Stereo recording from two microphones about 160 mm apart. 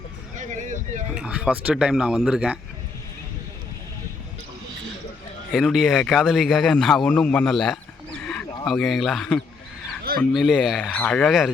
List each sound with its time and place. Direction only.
0.3 s speech: 50° right (ahead or behind)
1.1 s a man's voice: 5° right (ahead or behind)
5.5 s a man's voice: centre (ahead or behind)
8.2 s a sound: 5° left (ahead or behind)
8.6 s a man's voice: centre (ahead or behind)